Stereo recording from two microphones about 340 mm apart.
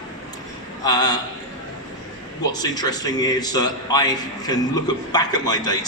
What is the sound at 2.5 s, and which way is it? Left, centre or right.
A man's voice, centre.